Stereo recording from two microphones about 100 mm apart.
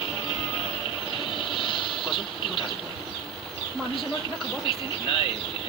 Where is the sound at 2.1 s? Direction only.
60° left (ahead or behind).